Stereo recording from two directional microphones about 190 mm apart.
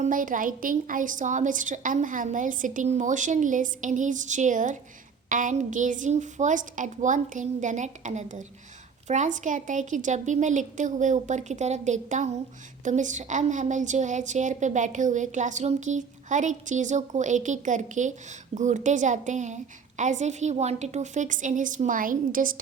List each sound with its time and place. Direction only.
0.0 s a woman's voice: 45° right (ahead or behind)